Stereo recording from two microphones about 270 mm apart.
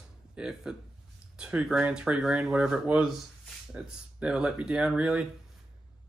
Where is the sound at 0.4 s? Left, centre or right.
Centre.